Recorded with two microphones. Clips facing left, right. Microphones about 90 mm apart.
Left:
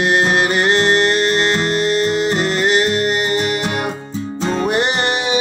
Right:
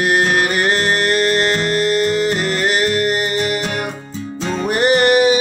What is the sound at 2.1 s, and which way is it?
Music, 30° left (ahead or behind).